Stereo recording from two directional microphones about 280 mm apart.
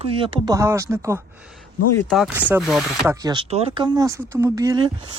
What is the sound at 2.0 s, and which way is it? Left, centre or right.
Speech, centre.